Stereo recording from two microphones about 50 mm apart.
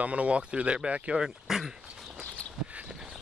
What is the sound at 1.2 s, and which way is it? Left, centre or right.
Speech, centre.